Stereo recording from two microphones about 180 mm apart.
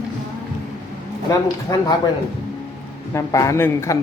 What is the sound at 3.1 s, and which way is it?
Speech, 15° left (ahead or behind).